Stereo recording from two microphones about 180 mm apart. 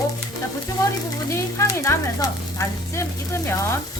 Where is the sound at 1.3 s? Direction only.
15° left (ahead or behind).